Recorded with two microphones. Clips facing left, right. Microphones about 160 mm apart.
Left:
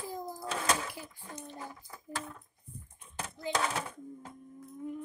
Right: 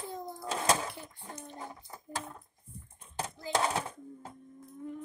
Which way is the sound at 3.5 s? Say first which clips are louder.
Right 2 dB; 30° right (ahead or behind).